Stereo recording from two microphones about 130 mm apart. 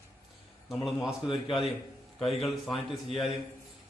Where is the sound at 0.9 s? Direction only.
5° right (ahead or behind).